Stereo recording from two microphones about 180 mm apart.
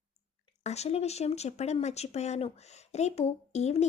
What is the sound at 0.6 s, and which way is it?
Speech, 35° left (ahead or behind).